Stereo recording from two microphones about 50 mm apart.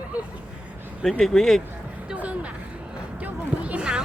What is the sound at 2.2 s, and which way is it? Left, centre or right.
Music, right.